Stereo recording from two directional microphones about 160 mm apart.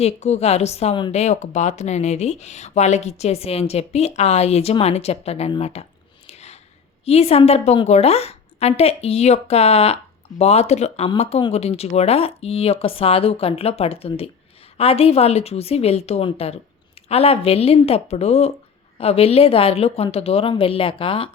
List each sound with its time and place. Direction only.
0.0 s speech: 40° left (ahead or behind)
6.2 s a sound: 45° left (ahead or behind)
7.0 s speech: 40° left (ahead or behind)